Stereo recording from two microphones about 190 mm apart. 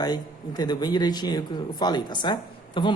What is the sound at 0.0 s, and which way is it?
Speech, 20° left (ahead or behind).